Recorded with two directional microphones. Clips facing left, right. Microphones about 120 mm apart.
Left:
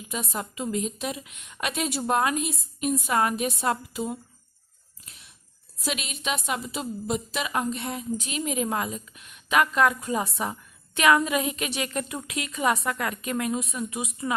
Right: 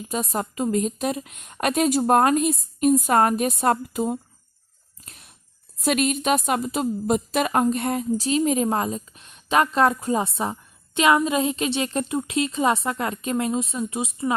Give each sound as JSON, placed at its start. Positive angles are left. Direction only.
{"t": 0.1, "sound": "speech", "side_deg": -40}
{"t": 5.0, "sound": "a sound", "side_deg": -45}
{"t": 5.8, "sound": "speech", "side_deg": -50}
{"t": 8.2, "sound": "a woman's voice", "side_deg": -35}